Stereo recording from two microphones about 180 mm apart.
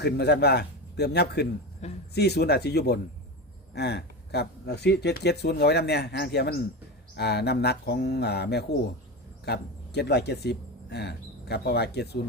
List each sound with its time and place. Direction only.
0.0 s speech: 65° left (ahead or behind)
1.8 s speech: 40° left (ahead or behind)
2.1 s speech: 65° left (ahead or behind)